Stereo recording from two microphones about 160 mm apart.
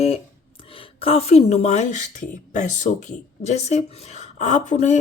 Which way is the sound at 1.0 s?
40° left (ahead or behind).